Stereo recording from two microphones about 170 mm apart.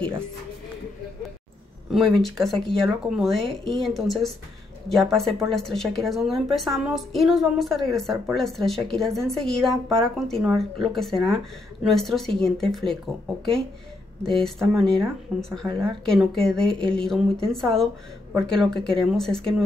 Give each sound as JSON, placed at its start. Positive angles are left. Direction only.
{"t": 1.9, "sound": "a woman's voice", "side_deg": 0}
{"t": 14.2, "sound": "a woman's voice", "side_deg": 5}